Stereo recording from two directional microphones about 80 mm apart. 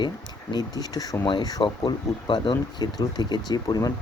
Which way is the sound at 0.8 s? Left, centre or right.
Left.